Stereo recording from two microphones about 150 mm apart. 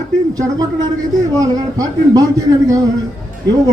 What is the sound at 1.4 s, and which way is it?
A man's voice, 25° right (ahead or behind).